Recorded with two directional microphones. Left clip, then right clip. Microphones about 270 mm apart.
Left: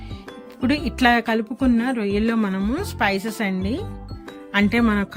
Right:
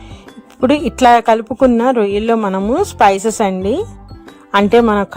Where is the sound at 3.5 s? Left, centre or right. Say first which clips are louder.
Right 10 dB; centre.